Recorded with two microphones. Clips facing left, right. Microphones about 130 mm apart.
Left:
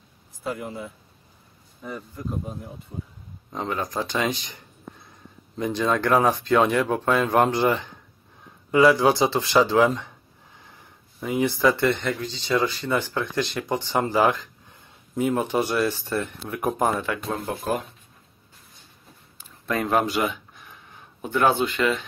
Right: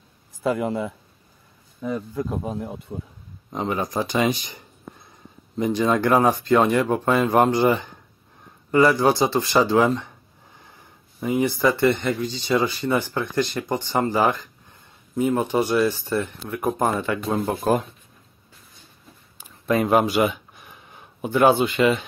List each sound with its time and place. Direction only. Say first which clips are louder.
0.4 s speech: right 8 dB; 90° right
3.5 s speech: right 3 dB; 10° right (ahead or behind)
5.6 s speech: right 3 dB; 10° right (ahead or behind)
11.1 s speech: right 2 dB; 5° right (ahead or behind)
19.7 s speech: right 4 dB; 15° right (ahead or behind)